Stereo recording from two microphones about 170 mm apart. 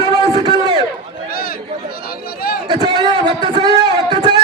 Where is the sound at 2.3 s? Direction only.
60° left (ahead or behind).